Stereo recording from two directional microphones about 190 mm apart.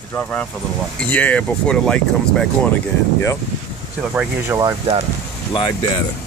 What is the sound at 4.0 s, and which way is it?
Speech, 5° right (ahead or behind).